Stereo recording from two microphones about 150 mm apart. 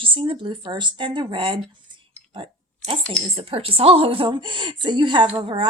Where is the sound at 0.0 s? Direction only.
35° right (ahead or behind).